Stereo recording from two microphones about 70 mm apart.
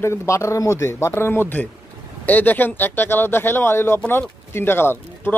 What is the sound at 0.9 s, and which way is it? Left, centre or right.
Speech, left.